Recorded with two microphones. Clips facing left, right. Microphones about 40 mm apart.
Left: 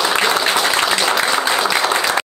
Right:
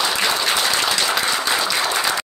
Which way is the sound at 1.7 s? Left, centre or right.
Left.